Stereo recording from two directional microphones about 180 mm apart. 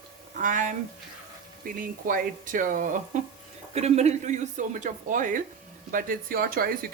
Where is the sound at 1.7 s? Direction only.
50° right (ahead or behind).